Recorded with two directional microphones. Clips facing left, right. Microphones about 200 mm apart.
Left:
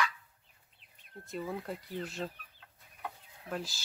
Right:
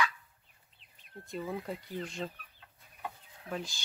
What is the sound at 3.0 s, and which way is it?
Chicken, centre (ahead or behind).